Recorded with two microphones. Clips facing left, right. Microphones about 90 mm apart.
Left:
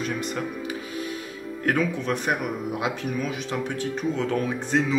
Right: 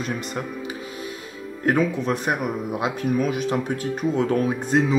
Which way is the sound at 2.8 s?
45° right (ahead or behind).